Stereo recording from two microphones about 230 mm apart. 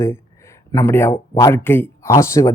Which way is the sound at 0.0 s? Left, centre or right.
Centre.